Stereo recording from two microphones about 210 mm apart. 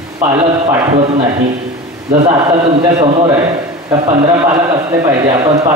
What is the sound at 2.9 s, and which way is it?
A man's voice, 15° right (ahead or behind).